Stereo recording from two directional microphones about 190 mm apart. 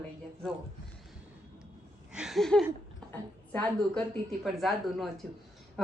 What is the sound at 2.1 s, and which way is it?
A woman's voice, centre (ahead or behind).